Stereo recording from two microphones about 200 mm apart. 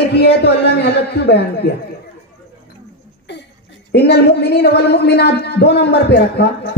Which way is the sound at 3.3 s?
60° left (ahead or behind).